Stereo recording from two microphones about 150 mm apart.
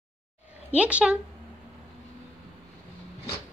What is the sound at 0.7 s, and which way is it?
Speech, 10° right (ahead or behind).